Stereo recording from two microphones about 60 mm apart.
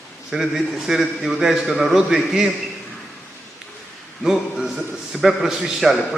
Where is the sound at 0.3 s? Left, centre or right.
Centre.